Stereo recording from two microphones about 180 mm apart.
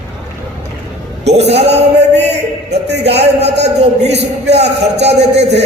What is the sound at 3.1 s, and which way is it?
Speech, 35° right (ahead or behind).